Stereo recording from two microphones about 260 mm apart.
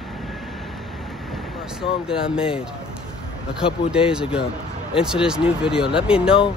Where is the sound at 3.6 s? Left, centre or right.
Left.